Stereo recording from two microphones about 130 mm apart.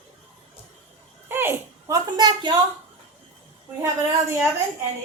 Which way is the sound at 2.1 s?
35° right (ahead or behind).